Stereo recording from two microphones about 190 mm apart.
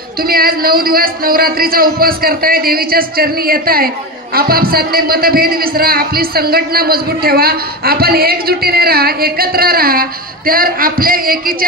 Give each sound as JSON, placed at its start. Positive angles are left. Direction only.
{"t": 0.2, "sound": "a man's voice", "side_deg": -50}